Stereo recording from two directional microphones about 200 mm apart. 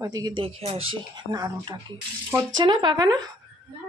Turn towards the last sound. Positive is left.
turn(degrees=-20)  # may be behind; listen again after turning